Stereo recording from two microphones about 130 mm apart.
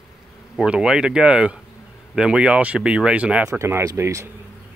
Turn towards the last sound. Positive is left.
turn(degrees=-20)  # may be behind; listen again after turning